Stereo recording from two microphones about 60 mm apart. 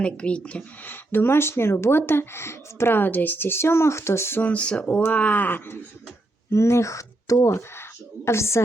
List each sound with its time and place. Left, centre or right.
0.0 s speech: centre
0.9 s speech: left
4.4 s speech: left
5.1 s speech: left
6.5 s speech: left